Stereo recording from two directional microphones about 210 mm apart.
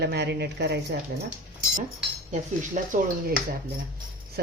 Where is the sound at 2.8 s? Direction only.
35° right (ahead or behind).